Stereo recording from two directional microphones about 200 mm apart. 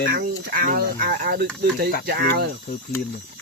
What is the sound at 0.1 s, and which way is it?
Speech, 45° right (ahead or behind).